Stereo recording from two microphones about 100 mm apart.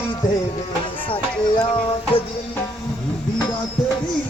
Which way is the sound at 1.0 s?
60° left (ahead or behind).